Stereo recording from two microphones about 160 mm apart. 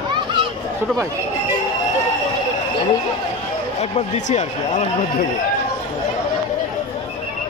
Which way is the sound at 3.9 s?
45° left (ahead or behind).